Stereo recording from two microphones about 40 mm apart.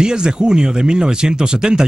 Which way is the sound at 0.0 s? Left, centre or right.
Right.